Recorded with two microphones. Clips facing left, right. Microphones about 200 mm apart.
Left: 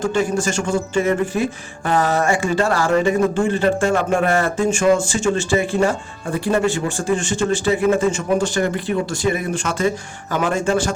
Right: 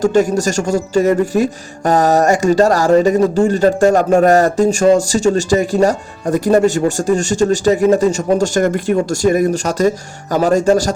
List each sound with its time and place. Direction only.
0.0 s speech: 40° right (ahead or behind)